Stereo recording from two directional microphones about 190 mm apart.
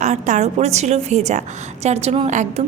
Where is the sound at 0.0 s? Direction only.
40° right (ahead or behind).